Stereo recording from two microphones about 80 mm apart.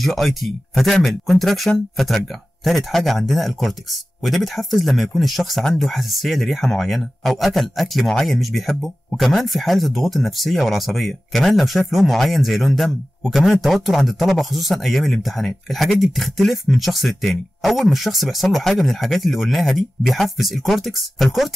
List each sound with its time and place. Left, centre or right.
0.0 s speech: centre